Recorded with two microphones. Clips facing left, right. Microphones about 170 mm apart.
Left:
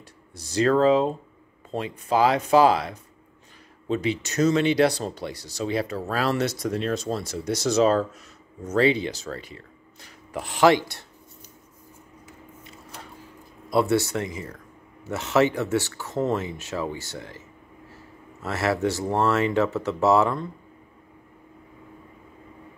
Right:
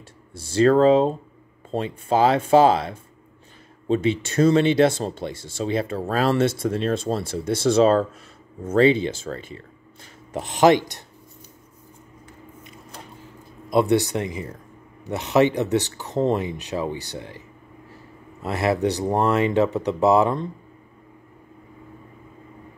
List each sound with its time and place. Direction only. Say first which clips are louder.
0.3 s speech: right 4 dB; 25° right (ahead or behind)
13.7 s speech: right 3 dB; 20° right (ahead or behind)
18.4 s speech: right 3 dB; 15° right (ahead or behind)